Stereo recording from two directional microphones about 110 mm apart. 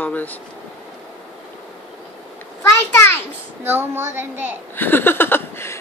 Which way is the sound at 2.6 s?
25° left (ahead or behind).